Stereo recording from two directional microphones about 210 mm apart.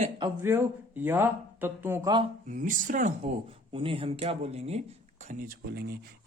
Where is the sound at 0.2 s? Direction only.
10° right (ahead or behind).